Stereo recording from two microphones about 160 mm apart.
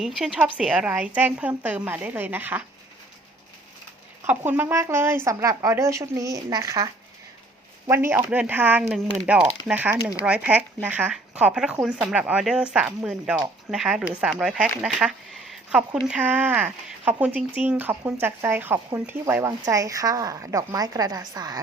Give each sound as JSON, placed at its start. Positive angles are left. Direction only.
{"t": 0.0, "sound": "speech", "side_deg": -5}
{"t": 4.2, "sound": "a woman's voice", "side_deg": -10}
{"t": 7.9, "sound": "speech", "side_deg": -15}